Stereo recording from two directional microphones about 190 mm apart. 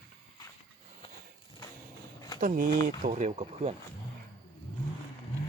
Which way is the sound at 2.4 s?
45° right (ahead or behind).